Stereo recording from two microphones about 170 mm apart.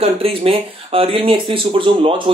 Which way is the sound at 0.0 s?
35° right (ahead or behind).